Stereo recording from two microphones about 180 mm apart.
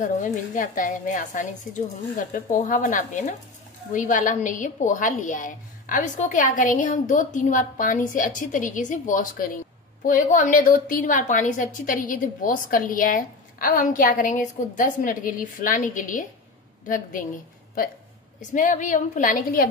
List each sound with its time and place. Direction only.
0.0 s a woman's voice: 45° left (ahead or behind)
18.4 s a woman's voice: 45° left (ahead or behind)